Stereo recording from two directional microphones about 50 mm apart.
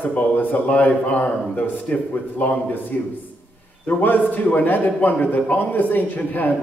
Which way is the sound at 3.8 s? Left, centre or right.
Left.